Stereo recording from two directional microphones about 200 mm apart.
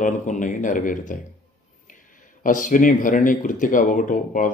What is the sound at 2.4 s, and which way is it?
Speech, 40° left (ahead or behind).